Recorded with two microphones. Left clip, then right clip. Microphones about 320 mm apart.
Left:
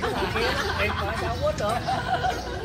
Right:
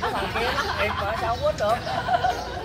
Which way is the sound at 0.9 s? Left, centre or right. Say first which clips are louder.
Right 2 dB; right.